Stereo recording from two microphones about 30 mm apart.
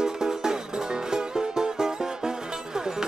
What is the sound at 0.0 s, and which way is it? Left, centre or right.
Music, right.